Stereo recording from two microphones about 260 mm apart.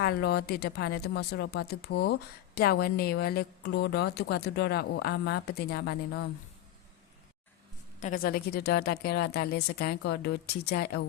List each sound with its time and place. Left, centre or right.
0.0 s a woman's voice: left
7.9 s a woman's voice: left